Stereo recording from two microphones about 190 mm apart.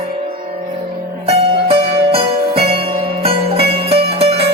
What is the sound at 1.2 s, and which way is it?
Music, 30° right (ahead or behind).